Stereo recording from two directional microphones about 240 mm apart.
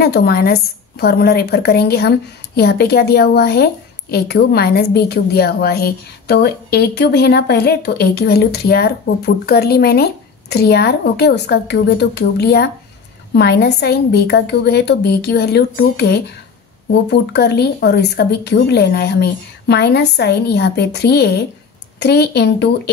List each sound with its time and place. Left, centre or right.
0.0 s a woman's voice: left